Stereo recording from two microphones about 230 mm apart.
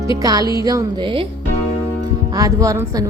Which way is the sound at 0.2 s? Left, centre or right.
Centre.